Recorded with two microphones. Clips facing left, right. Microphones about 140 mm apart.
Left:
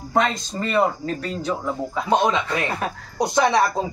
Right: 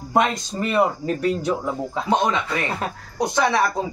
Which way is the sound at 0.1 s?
15° right (ahead or behind).